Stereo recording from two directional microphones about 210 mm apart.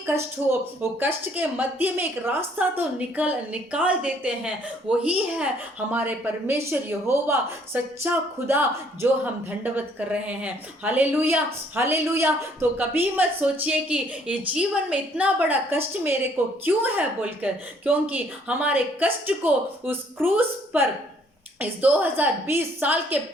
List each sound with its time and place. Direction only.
0.0 s speech: 10° right (ahead or behind)